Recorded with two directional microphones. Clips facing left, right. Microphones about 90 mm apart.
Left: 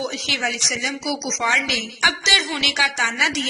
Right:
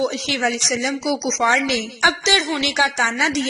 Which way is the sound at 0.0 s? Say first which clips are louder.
Right 5 dB; 35° right (ahead or behind).